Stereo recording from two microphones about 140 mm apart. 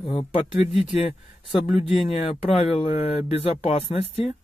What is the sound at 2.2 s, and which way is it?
Speech, 50° left (ahead or behind).